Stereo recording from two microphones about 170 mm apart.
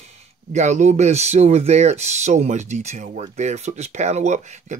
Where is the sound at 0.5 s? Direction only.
45° right (ahead or behind).